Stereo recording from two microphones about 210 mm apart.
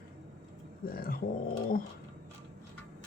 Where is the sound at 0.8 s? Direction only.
45° left (ahead or behind).